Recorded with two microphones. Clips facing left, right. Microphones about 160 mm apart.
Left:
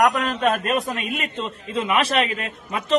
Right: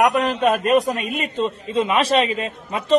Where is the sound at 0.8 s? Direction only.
40° right (ahead or behind).